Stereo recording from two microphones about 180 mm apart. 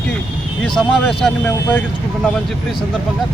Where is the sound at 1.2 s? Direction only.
10° left (ahead or behind).